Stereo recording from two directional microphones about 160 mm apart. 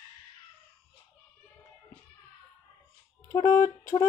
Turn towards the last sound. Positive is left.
turn(degrees=20)  # may be behind; listen again after turning